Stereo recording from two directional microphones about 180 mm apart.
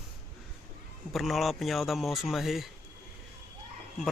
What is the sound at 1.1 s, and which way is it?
Speech, centre (ahead or behind).